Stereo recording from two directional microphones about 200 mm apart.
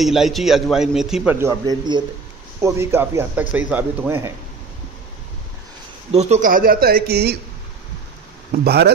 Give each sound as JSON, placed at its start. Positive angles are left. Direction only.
{"t": 0.0, "sound": "a man's voice", "side_deg": 0}
{"t": 6.1, "sound": "speech", "side_deg": -35}
{"t": 8.5, "sound": "speech", "side_deg": -55}